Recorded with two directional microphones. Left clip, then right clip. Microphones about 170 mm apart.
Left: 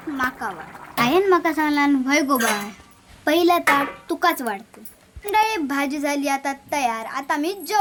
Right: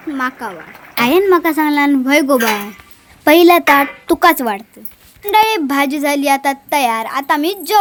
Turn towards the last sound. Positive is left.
turn(degrees=-45)  # may be behind; listen again after turning